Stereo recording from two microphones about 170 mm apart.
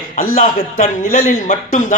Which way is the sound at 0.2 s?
55° left (ahead or behind).